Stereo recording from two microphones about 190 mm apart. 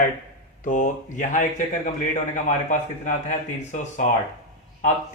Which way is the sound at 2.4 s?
40° left (ahead or behind).